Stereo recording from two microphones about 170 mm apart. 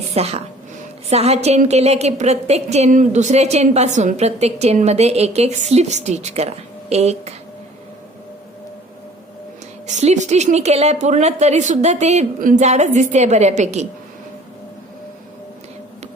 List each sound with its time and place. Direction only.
0.1 s a woman's voice: 35° right (ahead or behind)
9.8 s a woman's voice: 40° right (ahead or behind)